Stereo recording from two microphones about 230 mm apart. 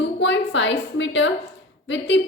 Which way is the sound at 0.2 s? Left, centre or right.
Left.